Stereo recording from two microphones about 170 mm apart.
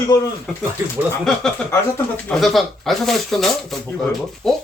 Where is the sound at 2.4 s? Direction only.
Centre (ahead or behind).